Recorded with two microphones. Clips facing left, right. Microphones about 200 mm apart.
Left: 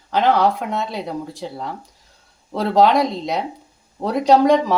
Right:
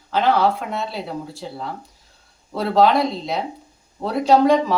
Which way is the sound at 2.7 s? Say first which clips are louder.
Left 1 dB; 20° left (ahead or behind).